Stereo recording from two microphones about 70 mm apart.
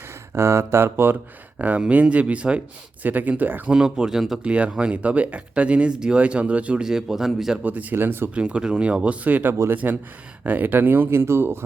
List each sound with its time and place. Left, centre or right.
0.3 s speech: right
1.5 s speech: right
3.7 s speech: centre
4.4 s speech: centre
7.6 s speech: right
8.4 s speech: centre; by 11.6 s right